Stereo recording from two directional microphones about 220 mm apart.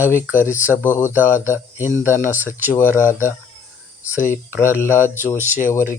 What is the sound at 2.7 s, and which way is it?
Speech, 10° left (ahead or behind).